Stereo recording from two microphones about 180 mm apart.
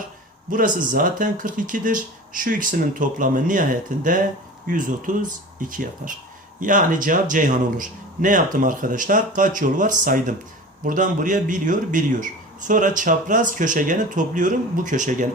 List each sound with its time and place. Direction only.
0.8 s a man's voice: 45° right (ahead or behind)